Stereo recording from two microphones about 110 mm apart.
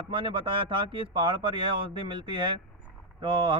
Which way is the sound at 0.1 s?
50° right (ahead or behind).